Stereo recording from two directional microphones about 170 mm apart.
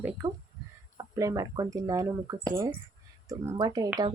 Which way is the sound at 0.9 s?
20° right (ahead or behind).